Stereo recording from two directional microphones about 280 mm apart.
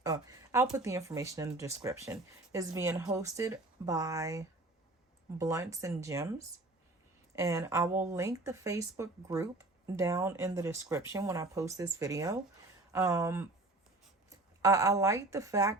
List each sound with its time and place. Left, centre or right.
0.0 s speech: centre
7.3 s speech: centre